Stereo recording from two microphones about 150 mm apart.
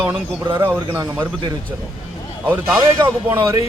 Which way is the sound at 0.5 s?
15° right (ahead or behind).